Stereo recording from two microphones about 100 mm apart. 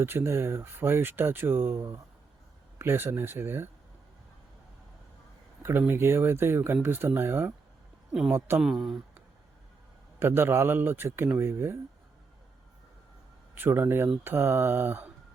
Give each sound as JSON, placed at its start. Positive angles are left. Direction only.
{"t": 0.0, "sound": "speech", "side_deg": -25}
{"t": 5.8, "sound": "speech", "side_deg": -25}
{"t": 8.6, "sound": "speech", "side_deg": -5}
{"t": 10.2, "sound": "speech", "side_deg": -25}
{"t": 13.6, "sound": "speech", "side_deg": -20}